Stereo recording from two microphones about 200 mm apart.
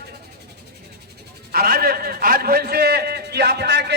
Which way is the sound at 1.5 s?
50° right (ahead or behind).